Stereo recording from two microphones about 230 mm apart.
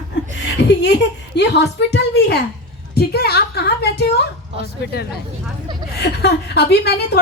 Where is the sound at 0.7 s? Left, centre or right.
Left.